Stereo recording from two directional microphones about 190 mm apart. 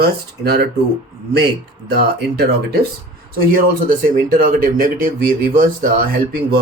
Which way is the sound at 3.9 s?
45° right (ahead or behind).